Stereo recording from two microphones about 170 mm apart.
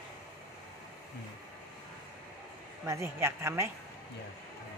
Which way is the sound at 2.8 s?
15° right (ahead or behind).